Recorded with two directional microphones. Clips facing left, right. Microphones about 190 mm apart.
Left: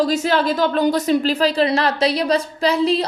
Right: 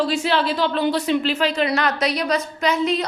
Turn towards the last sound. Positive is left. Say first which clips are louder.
# left 3 dB
turn(degrees=30)  # may be behind; listen again after turning